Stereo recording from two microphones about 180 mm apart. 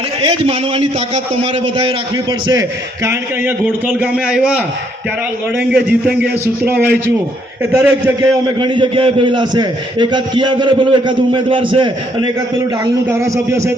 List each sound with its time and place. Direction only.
0.2 s a man's voice: 30° right (ahead or behind)
2.5 s a man's voice: 20° right (ahead or behind)
8.4 s a man's voice: 25° right (ahead or behind)
13.1 s a man's voice: 15° right (ahead or behind)